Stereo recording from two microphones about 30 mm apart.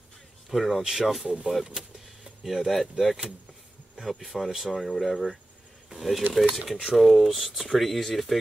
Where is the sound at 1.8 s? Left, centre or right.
Right.